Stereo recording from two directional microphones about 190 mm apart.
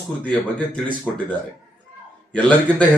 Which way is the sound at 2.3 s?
5° left (ahead or behind).